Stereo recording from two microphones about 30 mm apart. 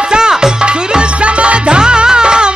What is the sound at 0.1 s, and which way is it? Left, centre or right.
Music, right.